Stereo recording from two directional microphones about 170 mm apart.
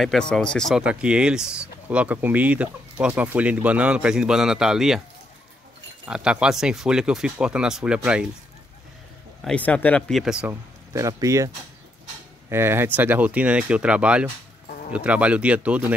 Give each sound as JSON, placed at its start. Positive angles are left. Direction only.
{"t": 0.0, "sound": "speech", "side_deg": 5}
{"t": 6.0, "sound": "speech", "side_deg": -5}
{"t": 9.4, "sound": "speech", "side_deg": 5}
{"t": 10.5, "sound": "speech", "side_deg": -20}